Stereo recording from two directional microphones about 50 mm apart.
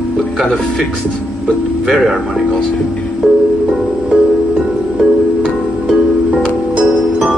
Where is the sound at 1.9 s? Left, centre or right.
Centre.